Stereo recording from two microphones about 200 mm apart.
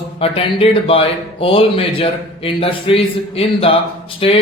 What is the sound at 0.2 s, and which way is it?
Speech, 30° left (ahead or behind).